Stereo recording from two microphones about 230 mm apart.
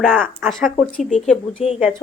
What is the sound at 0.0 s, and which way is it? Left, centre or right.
A woman's voice, centre.